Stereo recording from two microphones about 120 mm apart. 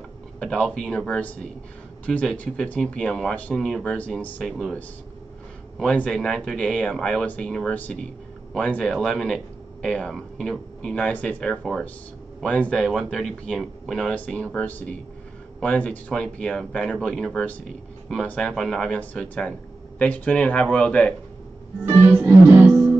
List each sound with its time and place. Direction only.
0.4 s speech: 10° left (ahead or behind)
4.5 s a man's voice: centre (ahead or behind)
5.8 s a man's voice: 10° left (ahead or behind)
21.8 s music: 20° right (ahead or behind)